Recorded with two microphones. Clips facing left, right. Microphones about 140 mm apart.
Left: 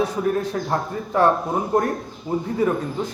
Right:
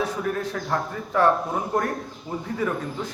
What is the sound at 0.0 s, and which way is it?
A man's voice, 20° left (ahead or behind).